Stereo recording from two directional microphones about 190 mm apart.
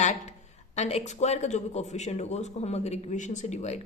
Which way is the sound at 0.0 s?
40° left (ahead or behind).